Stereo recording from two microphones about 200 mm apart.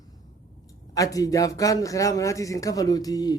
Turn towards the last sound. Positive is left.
turn(degrees=20)  # may be behind; listen again after turning